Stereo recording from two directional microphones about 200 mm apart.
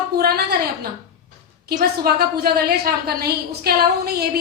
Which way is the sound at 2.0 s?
50° right (ahead or behind).